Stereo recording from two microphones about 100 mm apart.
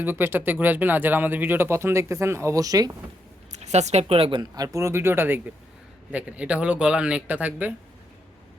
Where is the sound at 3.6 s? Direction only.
90° right; by 4.4 s 65° right (ahead or behind).